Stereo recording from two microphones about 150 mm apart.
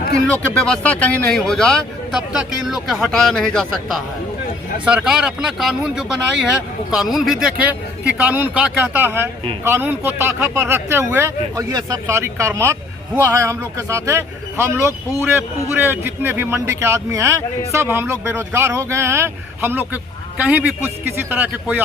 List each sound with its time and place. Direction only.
0.3 s a man's voice: 10° left (ahead or behind); by 21.8 s 10° right (ahead or behind)